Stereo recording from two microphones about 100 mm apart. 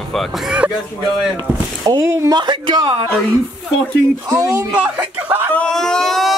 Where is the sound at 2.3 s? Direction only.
50° right (ahead or behind).